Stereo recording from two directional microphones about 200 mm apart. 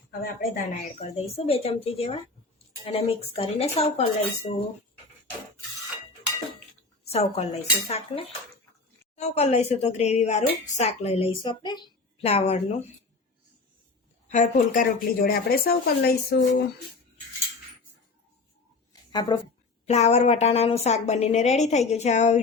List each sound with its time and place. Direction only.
0.1 s a woman's voice: 40° left (ahead or behind)
1.5 s speech: 30° left (ahead or behind)
7.1 s a woman's voice: 30° left (ahead or behind)
14.3 s speech: 40° left (ahead or behind)
19.1 s speech: 20° left (ahead or behind)
19.8 s a woman's voice: 35° left (ahead or behind)